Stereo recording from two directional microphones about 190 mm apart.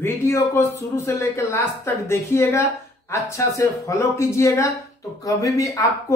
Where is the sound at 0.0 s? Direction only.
15° left (ahead or behind).